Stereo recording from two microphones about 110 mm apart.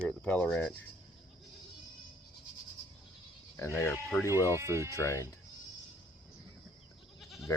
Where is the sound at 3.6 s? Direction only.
25° left (ahead or behind).